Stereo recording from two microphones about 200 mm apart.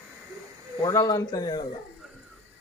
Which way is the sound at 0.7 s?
20° left (ahead or behind).